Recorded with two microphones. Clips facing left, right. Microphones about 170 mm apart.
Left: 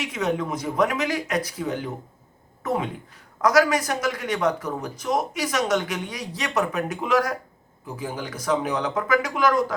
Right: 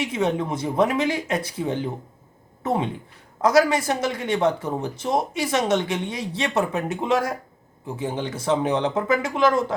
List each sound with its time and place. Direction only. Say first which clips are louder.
0.0 s speech: right 2 dB; 25° right (ahead or behind)